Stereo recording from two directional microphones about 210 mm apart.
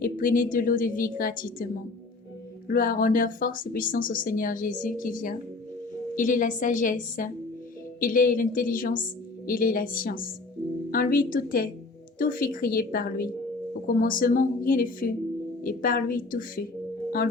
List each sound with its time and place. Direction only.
0.0 s a woman's voice: 40° left (ahead or behind)